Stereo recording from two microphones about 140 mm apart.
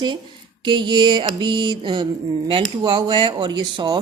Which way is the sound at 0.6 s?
35° right (ahead or behind).